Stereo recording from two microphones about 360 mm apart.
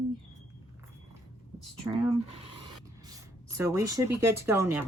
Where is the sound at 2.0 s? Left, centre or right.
Centre.